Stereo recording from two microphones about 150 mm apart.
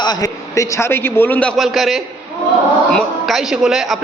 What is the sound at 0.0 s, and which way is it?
A man's voice, 25° left (ahead or behind).